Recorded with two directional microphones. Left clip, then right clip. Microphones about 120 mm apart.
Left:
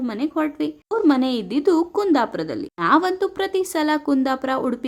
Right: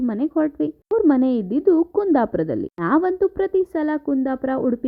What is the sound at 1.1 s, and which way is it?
Speech, 45° right (ahead or behind).